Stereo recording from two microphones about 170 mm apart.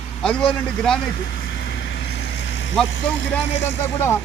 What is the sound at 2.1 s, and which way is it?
Vehicle, 90° left.